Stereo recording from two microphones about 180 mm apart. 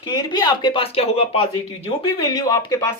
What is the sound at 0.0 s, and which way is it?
Speech, 25° left (ahead or behind).